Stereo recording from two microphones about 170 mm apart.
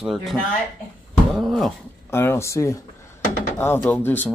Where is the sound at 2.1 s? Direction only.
15° left (ahead or behind).